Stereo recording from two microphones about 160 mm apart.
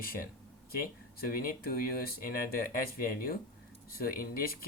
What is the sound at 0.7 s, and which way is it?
Speech, 65° left (ahead or behind).